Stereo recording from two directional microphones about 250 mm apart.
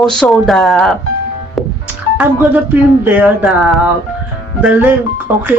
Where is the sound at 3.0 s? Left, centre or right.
Centre.